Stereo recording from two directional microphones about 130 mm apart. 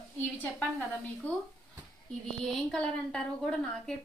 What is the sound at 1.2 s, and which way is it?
Speech, 15° left (ahead or behind).